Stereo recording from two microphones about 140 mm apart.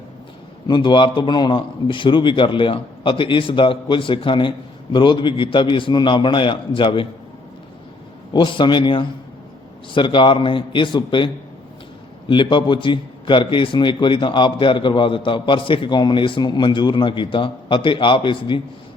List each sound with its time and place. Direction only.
0.7 s a man's voice: 35° left (ahead or behind)
8.3 s a man's voice: 35° left (ahead or behind)
12.3 s a man's voice: 35° left (ahead or behind)